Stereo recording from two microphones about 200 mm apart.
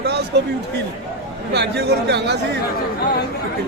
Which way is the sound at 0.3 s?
60° right (ahead or behind).